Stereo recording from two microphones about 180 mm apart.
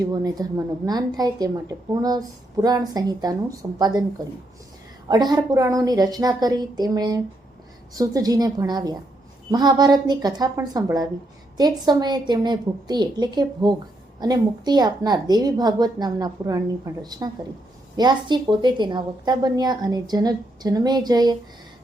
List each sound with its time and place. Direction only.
0.0 s a woman's voice: 20° right (ahead or behind)
5.0 s a woman's voice: 20° right (ahead or behind)